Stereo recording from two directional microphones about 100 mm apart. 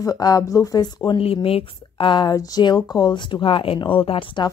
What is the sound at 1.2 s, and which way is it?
Speech, 70° left (ahead or behind).